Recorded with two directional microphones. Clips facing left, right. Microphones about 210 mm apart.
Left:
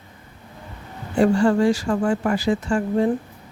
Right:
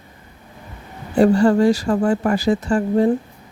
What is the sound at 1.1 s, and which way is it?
Speech, 35° right (ahead or behind).